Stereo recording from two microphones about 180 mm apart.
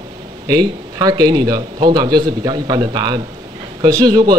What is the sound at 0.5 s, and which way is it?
A man's voice, 20° right (ahead or behind).